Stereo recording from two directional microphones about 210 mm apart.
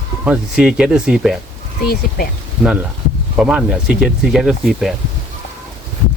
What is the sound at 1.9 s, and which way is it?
Speech, 45° left (ahead or behind).